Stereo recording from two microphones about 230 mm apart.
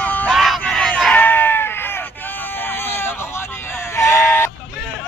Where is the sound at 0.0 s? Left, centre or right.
Centre.